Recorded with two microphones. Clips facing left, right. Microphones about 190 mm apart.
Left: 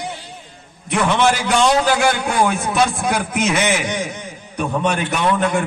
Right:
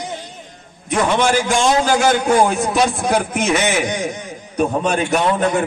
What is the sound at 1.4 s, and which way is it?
A man's voice, 40° right (ahead or behind).